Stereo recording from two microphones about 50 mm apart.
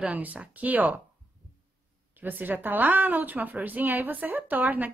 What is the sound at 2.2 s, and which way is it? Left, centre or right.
Speech, right.